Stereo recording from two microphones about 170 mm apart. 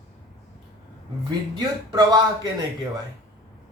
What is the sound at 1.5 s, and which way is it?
Speech, 25° right (ahead or behind).